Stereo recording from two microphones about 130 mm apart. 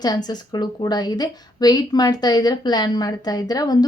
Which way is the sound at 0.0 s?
30° left (ahead or behind).